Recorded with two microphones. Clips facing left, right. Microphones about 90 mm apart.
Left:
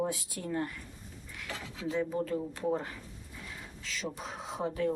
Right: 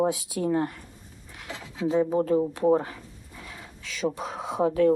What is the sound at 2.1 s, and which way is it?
Speech, 80° right.